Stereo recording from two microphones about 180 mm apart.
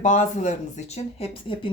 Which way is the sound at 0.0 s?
45° left (ahead or behind).